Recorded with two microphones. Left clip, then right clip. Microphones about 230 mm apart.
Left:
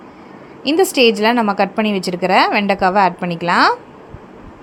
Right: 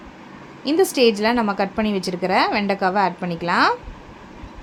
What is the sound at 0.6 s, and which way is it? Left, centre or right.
A woman's voice, left.